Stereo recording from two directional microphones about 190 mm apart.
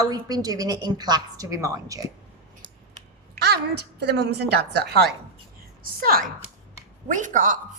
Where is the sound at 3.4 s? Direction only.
60° right (ahead or behind).